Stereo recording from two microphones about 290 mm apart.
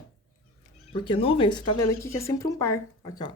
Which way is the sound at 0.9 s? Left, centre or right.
Centre.